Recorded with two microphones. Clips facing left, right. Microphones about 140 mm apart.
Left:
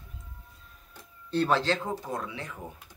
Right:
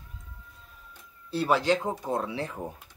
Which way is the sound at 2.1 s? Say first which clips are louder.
Right 5 dB; 30° right (ahead or behind).